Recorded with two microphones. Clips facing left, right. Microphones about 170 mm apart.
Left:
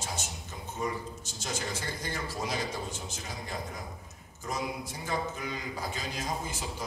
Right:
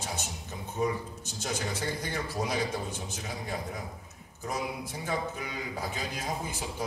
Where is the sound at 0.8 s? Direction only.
55° right (ahead or behind).